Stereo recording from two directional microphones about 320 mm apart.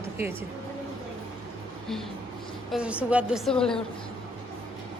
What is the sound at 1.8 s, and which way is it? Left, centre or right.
A woman's voice, centre.